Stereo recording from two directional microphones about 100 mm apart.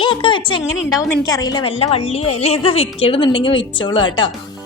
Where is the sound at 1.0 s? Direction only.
35° left (ahead or behind).